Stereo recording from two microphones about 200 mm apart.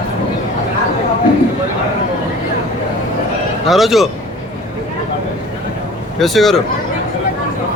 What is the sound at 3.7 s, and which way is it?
Speech, centre (ahead or behind).